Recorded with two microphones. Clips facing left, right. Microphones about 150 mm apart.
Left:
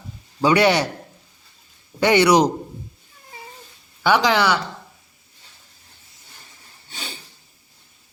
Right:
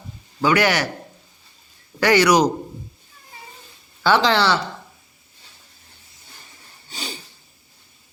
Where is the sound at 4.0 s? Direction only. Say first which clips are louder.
Even; 15° left (ahead or behind).